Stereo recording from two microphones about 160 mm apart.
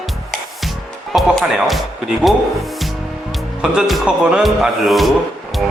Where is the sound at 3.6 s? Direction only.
Centre (ahead or behind).